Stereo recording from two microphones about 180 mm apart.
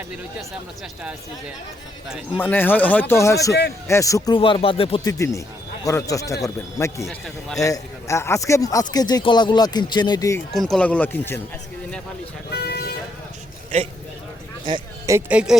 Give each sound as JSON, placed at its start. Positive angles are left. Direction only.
{"t": 2.0, "sound": "speech", "side_deg": -5}
{"t": 2.4, "sound": "speech", "side_deg": 10}
{"t": 4.4, "sound": "speech", "side_deg": 30}
{"t": 10.5, "sound": "speech", "side_deg": 0}
{"t": 12.5, "sound": "vehicle", "side_deg": 60}
{"t": 14.6, "sound": "speech", "side_deg": -20}